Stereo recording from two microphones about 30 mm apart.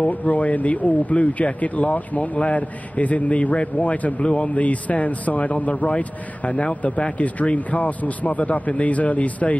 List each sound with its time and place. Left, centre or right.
0.0 s a man's voice: left
4.2 s a man's voice: left
4.6 s a man's voice: left